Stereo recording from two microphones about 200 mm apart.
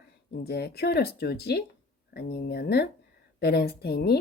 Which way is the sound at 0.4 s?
50° left (ahead or behind).